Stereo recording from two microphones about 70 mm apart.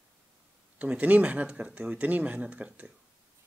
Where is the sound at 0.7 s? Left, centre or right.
Right.